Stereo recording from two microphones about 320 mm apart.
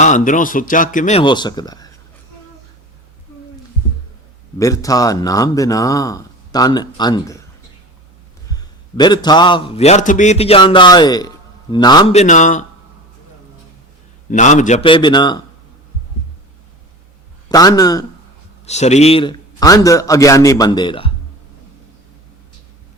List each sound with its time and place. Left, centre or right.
0.0 s speech: left
4.5 s speech: centre
8.4 s a man's voice: centre
14.3 s speech: left
17.5 s speech: centre